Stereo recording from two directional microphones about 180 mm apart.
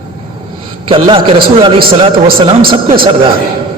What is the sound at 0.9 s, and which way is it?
A man's voice, 30° right (ahead or behind).